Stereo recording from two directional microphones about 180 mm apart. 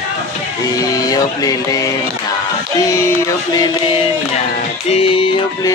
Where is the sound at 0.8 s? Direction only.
20° left (ahead or behind).